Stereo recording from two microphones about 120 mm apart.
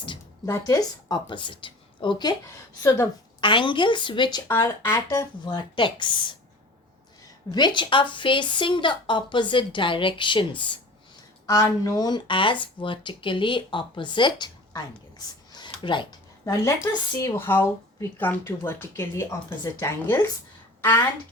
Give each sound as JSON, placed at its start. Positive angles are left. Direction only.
{"t": 0.4, "sound": "a woman's voice", "side_deg": 25}
{"t": 3.4, "sound": "speech", "side_deg": 45}
{"t": 4.4, "sound": "speech", "side_deg": 20}
{"t": 5.7, "sound": "speech", "side_deg": 45}
{"t": 7.5, "sound": "speech", "side_deg": 40}
{"t": 11.4, "sound": "speech", "side_deg": 25}
{"t": 15.5, "sound": "a sound", "side_deg": 40}
{"t": 16.5, "sound": "speech", "side_deg": 25}